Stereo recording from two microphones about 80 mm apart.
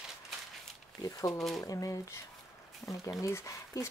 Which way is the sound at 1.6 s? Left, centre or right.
Left.